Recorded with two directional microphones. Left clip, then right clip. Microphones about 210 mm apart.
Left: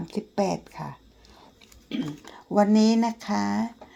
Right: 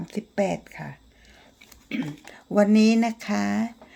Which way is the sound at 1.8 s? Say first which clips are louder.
Right 1 dB; 15° right (ahead or behind).